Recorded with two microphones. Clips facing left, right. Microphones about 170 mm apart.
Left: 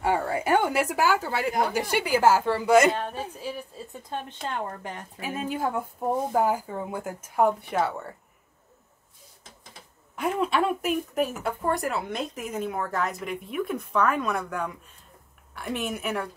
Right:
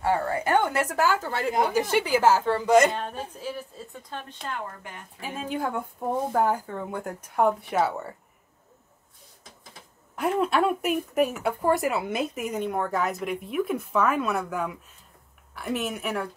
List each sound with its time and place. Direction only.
0.0 s a sound: 15° left (ahead or behind)
1.7 s a woman's voice: 10° left (ahead or behind)
4.1 s speech: 25° left (ahead or behind)
5.2 s speech: 5° left (ahead or behind)
10.1 s speech: centre (ahead or behind)